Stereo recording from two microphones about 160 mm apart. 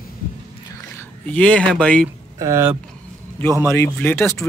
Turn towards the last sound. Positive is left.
turn(degrees=15)  # may be behind; listen again after turning